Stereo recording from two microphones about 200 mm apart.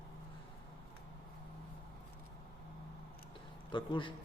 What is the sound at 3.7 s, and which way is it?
Speech, 25° left (ahead or behind).